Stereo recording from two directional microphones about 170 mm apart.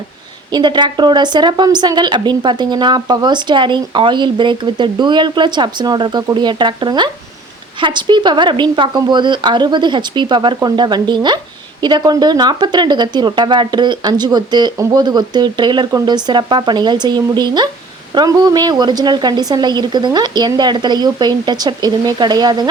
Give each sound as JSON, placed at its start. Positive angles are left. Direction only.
{"t": 0.5, "sound": "a woman's voice", "side_deg": -25}